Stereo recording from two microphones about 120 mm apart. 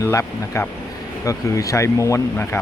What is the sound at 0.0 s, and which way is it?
Speech, 25° left (ahead or behind).